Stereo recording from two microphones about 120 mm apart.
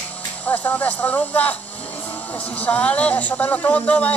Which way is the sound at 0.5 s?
15° left (ahead or behind).